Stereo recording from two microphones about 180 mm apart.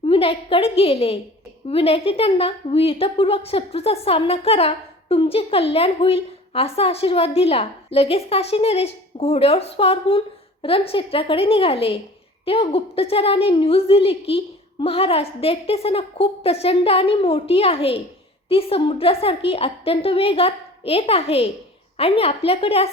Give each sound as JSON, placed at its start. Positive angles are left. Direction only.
{"t": 0.0, "sound": "a woman's voice", "side_deg": 30}